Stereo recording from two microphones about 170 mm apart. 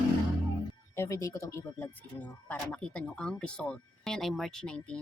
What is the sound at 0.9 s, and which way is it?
A woman's voice, 15° left (ahead or behind).